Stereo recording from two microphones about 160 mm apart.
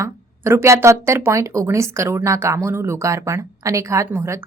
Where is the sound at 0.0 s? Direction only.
15° right (ahead or behind).